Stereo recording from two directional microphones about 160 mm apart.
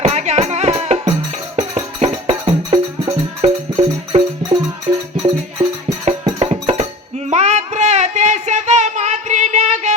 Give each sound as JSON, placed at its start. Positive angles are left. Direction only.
{"t": 0.0, "sound": "music", "side_deg": -45}
{"t": 6.4, "sound": "music", "side_deg": -40}
{"t": 7.3, "sound": "a sound", "side_deg": -45}